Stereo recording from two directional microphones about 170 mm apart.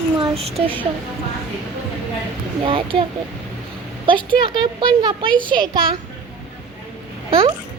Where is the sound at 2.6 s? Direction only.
30° right (ahead or behind).